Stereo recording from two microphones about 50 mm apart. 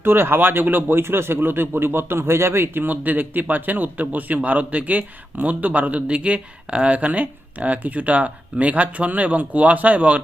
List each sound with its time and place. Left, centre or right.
0.0 s speech: right
2.8 s a man's voice: right